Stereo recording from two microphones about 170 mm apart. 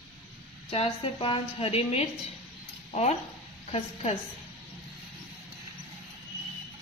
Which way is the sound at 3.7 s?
35° left (ahead or behind).